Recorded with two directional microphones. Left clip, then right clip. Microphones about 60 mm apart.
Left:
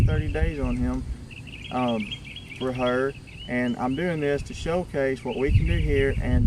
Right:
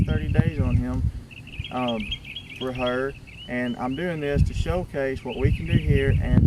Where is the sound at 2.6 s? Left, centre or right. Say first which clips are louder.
Left 1 dB; centre.